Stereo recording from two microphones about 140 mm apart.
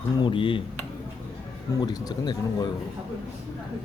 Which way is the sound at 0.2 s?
35° left (ahead or behind).